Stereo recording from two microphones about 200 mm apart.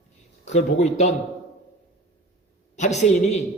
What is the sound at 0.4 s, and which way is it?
Speech, 35° left (ahead or behind).